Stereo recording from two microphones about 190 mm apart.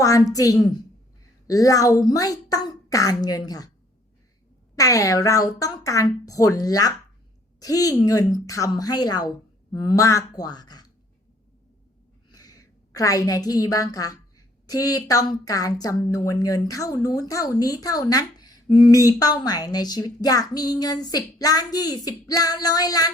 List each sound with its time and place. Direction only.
0.0 s speech: 15° left (ahead or behind)
4.7 s speech: 15° left (ahead or behind)
12.3 s a woman's voice: 20° left (ahead or behind)